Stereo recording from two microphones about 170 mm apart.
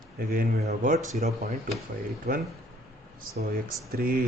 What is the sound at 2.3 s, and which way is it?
Speech, 65° right (ahead or behind).